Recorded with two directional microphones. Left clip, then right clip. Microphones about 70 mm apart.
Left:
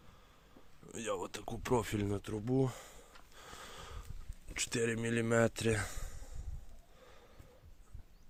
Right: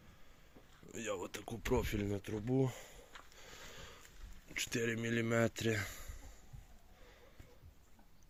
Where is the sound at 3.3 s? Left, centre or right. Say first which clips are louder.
Left 6 dB; left.